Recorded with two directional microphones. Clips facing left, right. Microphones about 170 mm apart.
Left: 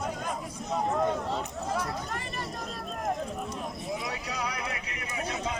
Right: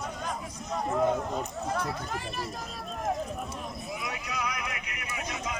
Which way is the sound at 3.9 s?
30° left (ahead or behind).